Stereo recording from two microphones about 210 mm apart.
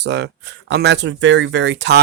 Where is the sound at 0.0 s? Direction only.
55° right (ahead or behind).